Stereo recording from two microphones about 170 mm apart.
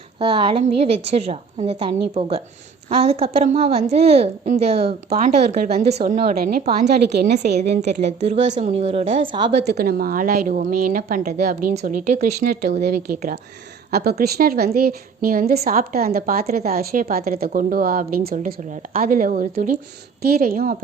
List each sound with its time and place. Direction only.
0.2 s a woman's voice: 30° right (ahead or behind)
5.0 s a woman's voice: 60° right (ahead or behind)
5.7 s a woman's voice: 70° right (ahead or behind)
6.1 s a woman's voice: 55° right (ahead or behind)
6.7 s a woman's voice: 75° right (ahead or behind)
7.6 s a woman's voice: 40° right (ahead or behind)
9.6 s a woman's voice: 60° right (ahead or behind)
13.1 s a woman's voice: 45° right (ahead or behind)
13.9 s a woman's voice: 65° right (ahead or behind)
20.2 s a woman's voice: 60° right (ahead or behind)